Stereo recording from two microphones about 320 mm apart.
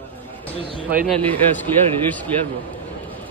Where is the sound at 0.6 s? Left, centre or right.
Right.